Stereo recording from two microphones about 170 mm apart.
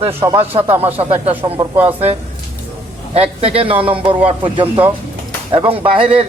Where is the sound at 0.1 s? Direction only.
15° right (ahead or behind).